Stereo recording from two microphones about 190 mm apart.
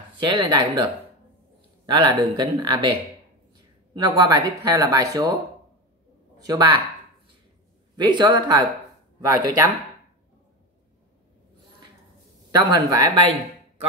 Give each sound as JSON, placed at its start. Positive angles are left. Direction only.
{"t": 0.1, "sound": "speech", "side_deg": -25}
{"t": 1.9, "sound": "speech", "side_deg": -25}
{"t": 3.9, "sound": "speech", "side_deg": -20}
{"t": 6.4, "sound": "speech", "side_deg": -20}
{"t": 7.9, "sound": "speech", "side_deg": -25}
{"t": 12.4, "sound": "speech", "side_deg": -20}